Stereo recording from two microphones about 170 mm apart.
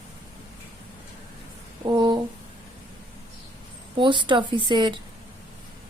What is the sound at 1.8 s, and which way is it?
Speech, 25° right (ahead or behind).